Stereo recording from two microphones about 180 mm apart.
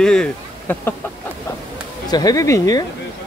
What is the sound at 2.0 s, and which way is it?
Speech, 20° left (ahead or behind).